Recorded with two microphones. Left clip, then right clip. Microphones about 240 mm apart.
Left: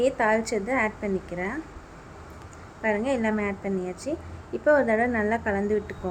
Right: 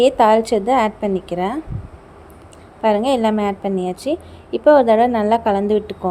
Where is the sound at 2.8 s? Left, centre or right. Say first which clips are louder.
Right 10 dB; right.